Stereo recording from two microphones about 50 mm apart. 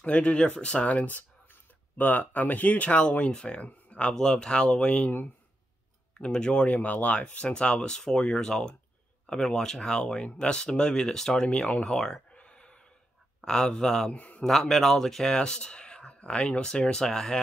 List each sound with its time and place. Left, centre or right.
0.0 s speech: left
3.6 s a sound: left
4.1 s speech: centre
6.3 s speech: centre
11.8 s speech: centre
12.3 s a sound: left
13.4 s speech: centre
14.1 s a man's voice: left
14.4 s speech: centre